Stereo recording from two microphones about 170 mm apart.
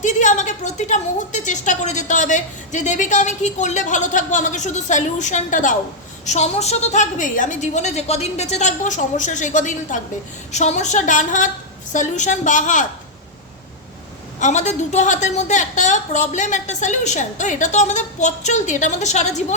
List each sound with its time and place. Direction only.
0.0 s a woman's voice: 45° left (ahead or behind)
14.3 s a woman's voice: 45° left (ahead or behind)